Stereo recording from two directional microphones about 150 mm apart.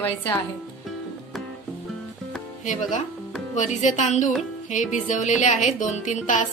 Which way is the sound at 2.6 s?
55° left (ahead or behind).